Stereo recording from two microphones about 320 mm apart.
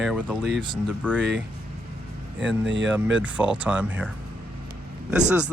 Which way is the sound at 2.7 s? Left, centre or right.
Right.